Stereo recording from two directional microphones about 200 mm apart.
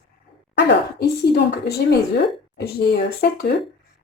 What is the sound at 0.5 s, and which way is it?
Speech, 50° left (ahead or behind).